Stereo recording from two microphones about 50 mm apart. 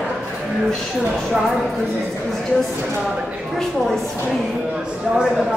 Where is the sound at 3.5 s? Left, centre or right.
Centre.